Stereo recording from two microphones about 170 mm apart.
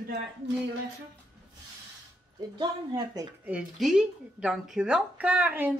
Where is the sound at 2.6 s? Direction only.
25° right (ahead or behind).